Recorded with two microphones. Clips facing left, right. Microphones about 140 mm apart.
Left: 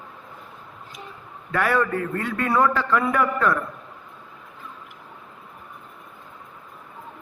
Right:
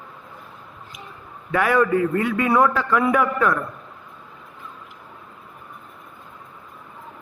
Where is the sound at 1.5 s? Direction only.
10° right (ahead or behind).